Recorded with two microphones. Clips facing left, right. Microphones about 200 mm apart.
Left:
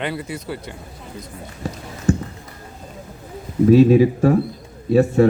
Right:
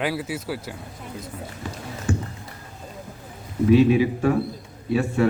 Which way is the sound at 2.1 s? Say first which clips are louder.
Left 6 dB; 40° left (ahead or behind).